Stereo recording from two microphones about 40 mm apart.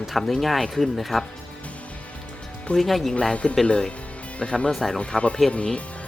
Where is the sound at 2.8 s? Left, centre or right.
Centre.